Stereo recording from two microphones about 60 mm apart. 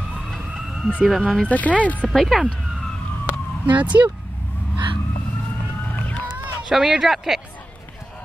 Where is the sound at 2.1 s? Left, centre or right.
Centre.